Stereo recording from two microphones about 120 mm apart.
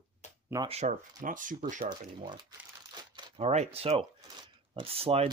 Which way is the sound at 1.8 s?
40° right (ahead or behind).